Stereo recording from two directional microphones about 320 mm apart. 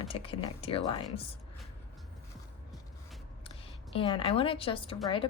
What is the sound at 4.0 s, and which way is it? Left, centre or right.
A woman's voice, centre.